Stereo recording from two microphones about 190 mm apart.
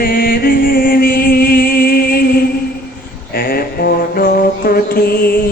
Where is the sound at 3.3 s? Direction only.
50° left (ahead or behind).